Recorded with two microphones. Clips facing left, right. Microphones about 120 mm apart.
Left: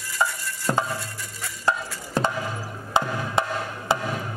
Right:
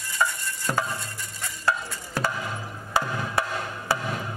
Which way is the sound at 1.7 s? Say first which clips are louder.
Left 2 dB; 20° left (ahead or behind).